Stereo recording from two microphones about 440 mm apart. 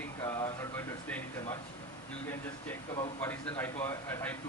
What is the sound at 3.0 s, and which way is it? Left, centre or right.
A man's voice, centre.